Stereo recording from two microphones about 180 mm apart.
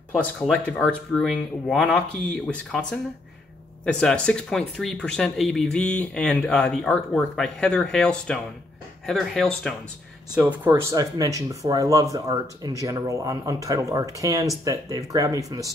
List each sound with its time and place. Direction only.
0.1 s speech: 5° left (ahead or behind)
10.7 s speech: 15° right (ahead or behind)